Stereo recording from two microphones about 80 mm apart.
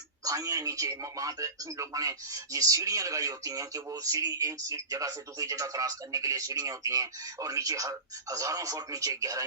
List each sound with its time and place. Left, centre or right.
0.3 s speech: right